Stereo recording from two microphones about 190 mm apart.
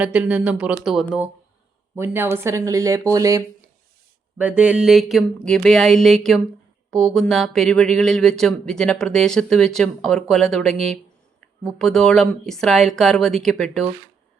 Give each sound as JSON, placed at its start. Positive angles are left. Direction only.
{"t": 0.0, "sound": "speech", "side_deg": -5}